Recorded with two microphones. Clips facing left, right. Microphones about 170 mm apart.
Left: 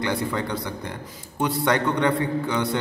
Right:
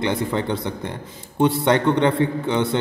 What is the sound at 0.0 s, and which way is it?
A man's voice, 25° right (ahead or behind).